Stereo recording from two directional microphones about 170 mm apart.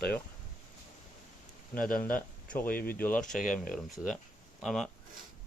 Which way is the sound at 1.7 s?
55° left (ahead or behind).